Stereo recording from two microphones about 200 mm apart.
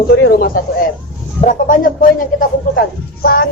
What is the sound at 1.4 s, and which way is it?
Speech, 45° left (ahead or behind).